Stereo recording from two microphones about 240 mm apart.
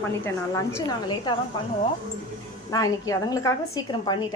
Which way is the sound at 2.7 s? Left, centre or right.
Centre.